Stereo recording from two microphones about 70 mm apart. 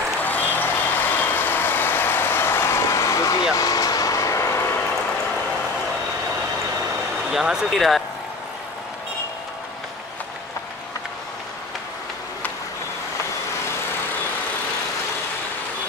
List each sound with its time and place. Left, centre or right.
0.2 s vehicle: left
3.5 s vehicle: left
7.2 s speech: centre